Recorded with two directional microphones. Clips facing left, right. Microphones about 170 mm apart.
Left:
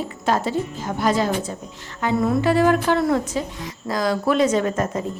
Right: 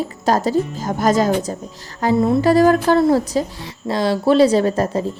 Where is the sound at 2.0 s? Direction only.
30° right (ahead or behind).